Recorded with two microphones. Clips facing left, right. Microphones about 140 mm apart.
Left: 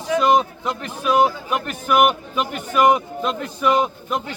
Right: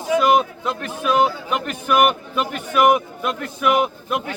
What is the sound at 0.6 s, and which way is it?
A man's voice, 15° left (ahead or behind).